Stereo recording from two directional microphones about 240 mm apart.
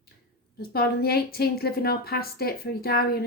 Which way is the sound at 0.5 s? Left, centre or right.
Left.